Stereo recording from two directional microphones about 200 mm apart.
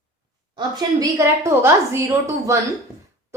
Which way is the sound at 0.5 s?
15° right (ahead or behind).